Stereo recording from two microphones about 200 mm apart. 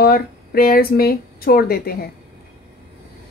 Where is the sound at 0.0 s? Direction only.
50° left (ahead or behind).